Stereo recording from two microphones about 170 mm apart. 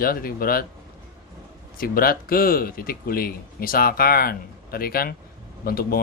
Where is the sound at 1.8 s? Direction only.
60° left (ahead or behind).